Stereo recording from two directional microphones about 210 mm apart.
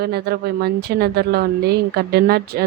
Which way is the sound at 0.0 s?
50° right (ahead or behind).